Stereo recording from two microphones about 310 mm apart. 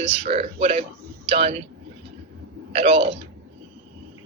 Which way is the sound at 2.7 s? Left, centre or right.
Centre.